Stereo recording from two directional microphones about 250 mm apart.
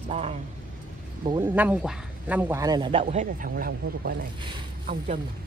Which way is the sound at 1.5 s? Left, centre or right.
Centre.